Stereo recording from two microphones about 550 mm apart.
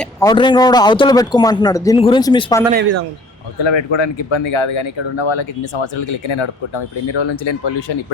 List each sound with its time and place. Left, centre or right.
0.0 s speech: centre
3.6 s speech: left